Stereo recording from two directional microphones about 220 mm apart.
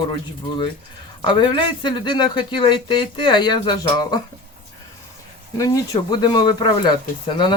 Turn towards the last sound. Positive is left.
turn(degrees=20)  # may be behind; listen again after turning